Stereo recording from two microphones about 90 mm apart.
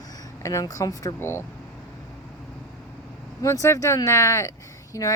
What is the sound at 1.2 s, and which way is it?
Speech, 30° left (ahead or behind).